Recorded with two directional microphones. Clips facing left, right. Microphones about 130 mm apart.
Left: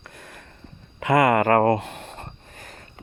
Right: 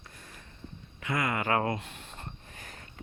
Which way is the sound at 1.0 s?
75° left (ahead or behind).